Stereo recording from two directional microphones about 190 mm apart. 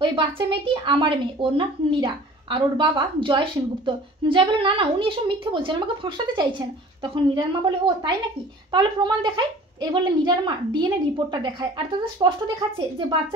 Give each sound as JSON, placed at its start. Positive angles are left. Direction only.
{"t": 0.0, "sound": "speech", "side_deg": -25}